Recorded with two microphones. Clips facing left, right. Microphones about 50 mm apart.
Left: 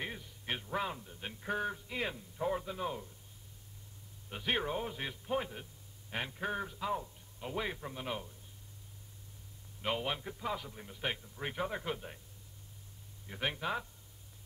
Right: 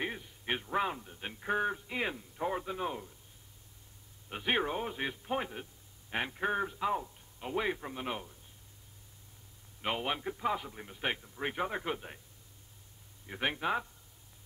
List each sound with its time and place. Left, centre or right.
0.0 s a man's voice: centre
4.3 s a man's voice: centre
9.8 s a man's voice: centre
13.3 s a man's voice: centre